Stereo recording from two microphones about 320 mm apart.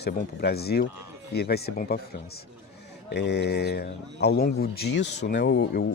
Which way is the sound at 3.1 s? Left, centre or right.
Left.